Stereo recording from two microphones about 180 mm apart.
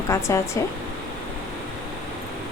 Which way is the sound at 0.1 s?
15° left (ahead or behind).